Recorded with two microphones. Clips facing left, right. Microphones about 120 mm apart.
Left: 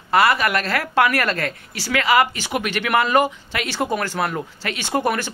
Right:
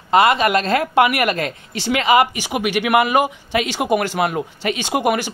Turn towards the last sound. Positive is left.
turn(degrees=-15)  # may be behind; listen again after turning